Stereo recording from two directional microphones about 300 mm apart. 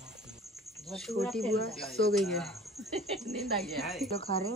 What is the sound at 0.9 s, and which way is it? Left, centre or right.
Speech, centre.